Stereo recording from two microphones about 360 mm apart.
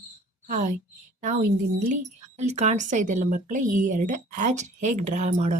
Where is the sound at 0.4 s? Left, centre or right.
Right.